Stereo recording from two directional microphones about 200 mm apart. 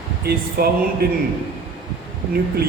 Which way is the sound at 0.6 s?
50° right (ahead or behind).